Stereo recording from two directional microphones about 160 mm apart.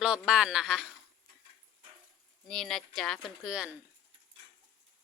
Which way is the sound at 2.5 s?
Centre (ahead or behind).